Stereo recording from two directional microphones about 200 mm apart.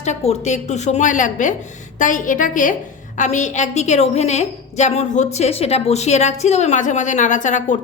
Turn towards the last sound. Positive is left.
turn(degrees=40)  # may be behind; listen again after turning